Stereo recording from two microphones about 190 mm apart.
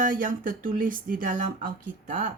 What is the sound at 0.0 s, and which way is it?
A woman's voice, 45° right (ahead or behind).